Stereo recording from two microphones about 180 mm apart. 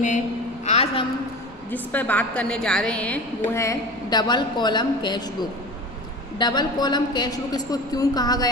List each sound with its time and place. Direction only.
0.7 s a sound: 35° left (ahead or behind)
1.7 s a woman's voice: 10° left (ahead or behind); by 5.2 s 25° left (ahead or behind)
6.3 s a woman's voice: 25° left (ahead or behind)